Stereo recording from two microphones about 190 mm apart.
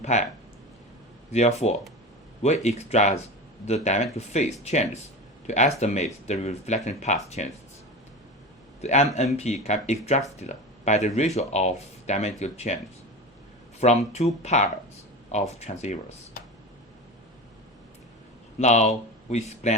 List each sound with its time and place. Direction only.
0.0 s speech: 35° left (ahead or behind)
1.3 s speech: 35° left (ahead or behind)
8.8 s a man's voice: 35° left (ahead or behind)
13.7 s speech: 35° left (ahead or behind)
18.6 s speech: 35° left (ahead or behind)